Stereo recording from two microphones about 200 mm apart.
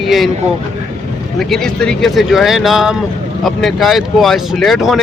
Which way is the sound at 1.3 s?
Centre (ahead or behind).